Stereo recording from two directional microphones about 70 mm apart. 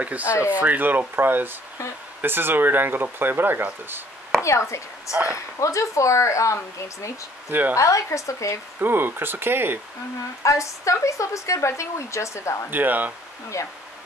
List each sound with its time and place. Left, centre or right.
0.0 s speech: right
4.4 s a woman's voice: left
8.7 s speech: right
10.4 s a woman's voice: left
12.7 s speech: right
13.5 s speech: left